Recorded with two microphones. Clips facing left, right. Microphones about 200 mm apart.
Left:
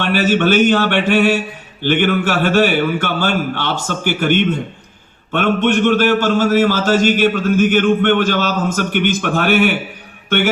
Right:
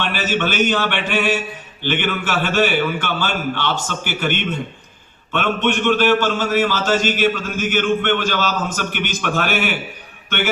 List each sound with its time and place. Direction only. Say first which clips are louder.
0.0 s a man's voice: left 7 dB; 50° left (ahead or behind)